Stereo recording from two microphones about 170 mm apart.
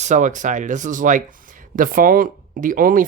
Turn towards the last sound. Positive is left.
turn(degrees=-55)  # may be behind; listen again after turning